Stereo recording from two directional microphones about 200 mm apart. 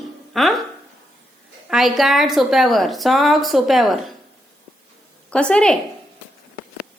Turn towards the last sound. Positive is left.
turn(degrees=5)  # may be behind; listen again after turning